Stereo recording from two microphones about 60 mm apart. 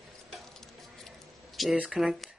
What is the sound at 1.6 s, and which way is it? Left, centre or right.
Speech, centre.